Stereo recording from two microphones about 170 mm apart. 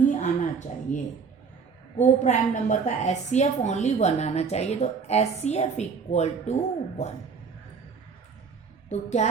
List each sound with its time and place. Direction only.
0.1 s a sound: 45° left (ahead or behind)
2.2 s a woman's voice: 45° left (ahead or behind)
8.9 s speech: 40° left (ahead or behind)